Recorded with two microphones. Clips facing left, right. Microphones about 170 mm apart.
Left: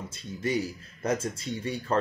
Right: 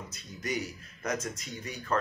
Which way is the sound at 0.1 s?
30° left (ahead or behind).